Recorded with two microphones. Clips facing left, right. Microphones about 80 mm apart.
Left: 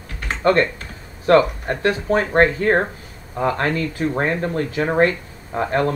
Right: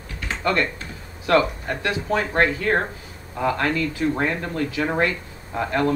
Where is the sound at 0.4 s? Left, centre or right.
Left.